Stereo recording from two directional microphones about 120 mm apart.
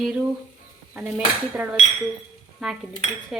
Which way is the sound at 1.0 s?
10° right (ahead or behind).